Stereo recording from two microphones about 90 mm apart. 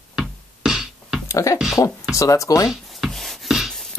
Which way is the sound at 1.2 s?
35° left (ahead or behind).